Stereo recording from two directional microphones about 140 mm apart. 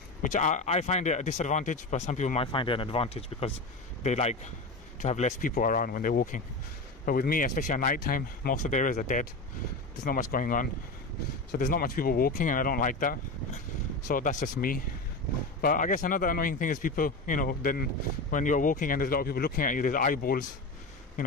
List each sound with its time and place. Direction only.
0.2 s speech: 60° left (ahead or behind)
2.4 s speech: 35° left (ahead or behind); by 5.5 s 55° left (ahead or behind)
5.5 s a man's voice: 80° left
7.1 s a man's voice: 90° left
14.0 s a man's voice: 70° left (ahead or behind); by 17.8 s 85° left
18.3 s a man's voice: 65° left (ahead or behind)